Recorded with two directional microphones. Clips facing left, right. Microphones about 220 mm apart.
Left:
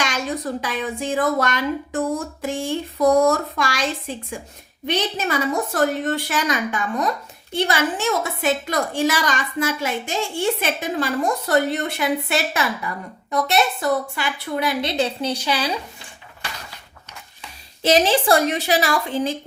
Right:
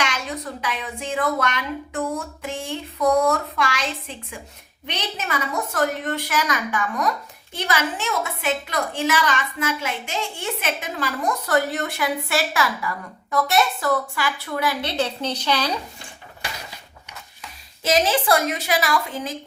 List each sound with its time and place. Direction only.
0.0 s a woman's voice: 35° left (ahead or behind)
2.0 s a sound: 35° left (ahead or behind)
5.1 s a woman's voice: 30° left (ahead or behind)
7.5 s a sound: 30° left (ahead or behind)
10.4 s a woman's voice: 35° left (ahead or behind); by 15.8 s 10° left (ahead or behind)
17.8 s a woman's voice: 30° left (ahead or behind)